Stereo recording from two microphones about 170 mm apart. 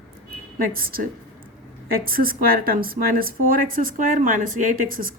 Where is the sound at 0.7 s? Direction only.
60° right (ahead or behind).